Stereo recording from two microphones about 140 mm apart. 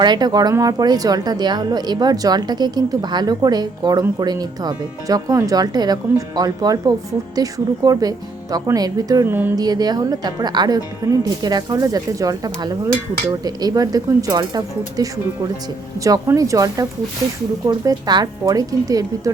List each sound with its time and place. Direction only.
0.0 s speech: 30° right (ahead or behind); by 9.6 s 15° right (ahead or behind)
9.6 s speech: 30° right (ahead or behind)